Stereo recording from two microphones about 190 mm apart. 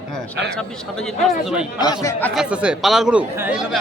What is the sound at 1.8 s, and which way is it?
Speech, 20° left (ahead or behind).